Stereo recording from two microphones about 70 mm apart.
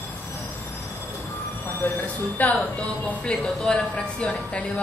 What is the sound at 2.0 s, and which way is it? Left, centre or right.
Speech, left.